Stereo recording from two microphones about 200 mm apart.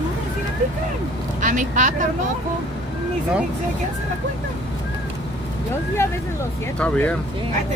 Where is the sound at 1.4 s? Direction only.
40° right (ahead or behind).